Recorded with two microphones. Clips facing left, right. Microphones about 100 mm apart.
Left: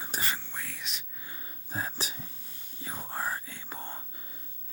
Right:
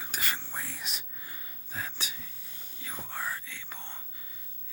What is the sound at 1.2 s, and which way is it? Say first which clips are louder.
Whispering: left 1 dB; 30° left (ahead or behind).